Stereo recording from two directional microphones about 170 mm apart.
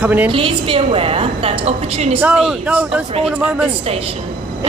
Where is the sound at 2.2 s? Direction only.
5° right (ahead or behind).